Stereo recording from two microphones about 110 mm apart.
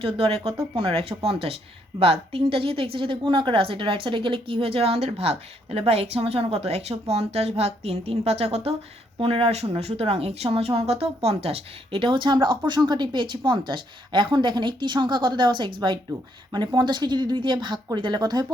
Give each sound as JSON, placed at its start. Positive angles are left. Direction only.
{"t": 0.0, "sound": "a woman's voice", "side_deg": -60}